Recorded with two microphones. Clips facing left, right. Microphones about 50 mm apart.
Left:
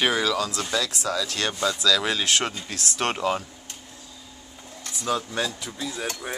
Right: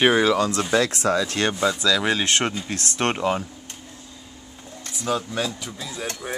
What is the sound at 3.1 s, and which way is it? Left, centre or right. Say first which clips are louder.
Speech: right 2 dB; centre.